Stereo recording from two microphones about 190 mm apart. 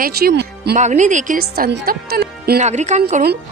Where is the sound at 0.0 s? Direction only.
55° right (ahead or behind).